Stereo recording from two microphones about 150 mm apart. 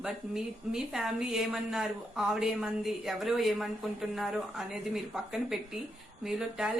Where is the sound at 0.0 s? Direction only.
5° right (ahead or behind).